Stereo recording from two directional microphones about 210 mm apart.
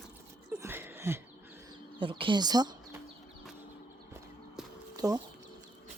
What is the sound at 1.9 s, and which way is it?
Speech, 25° right (ahead or behind).